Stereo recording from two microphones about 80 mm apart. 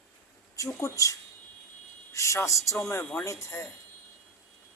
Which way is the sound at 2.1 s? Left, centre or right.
Left.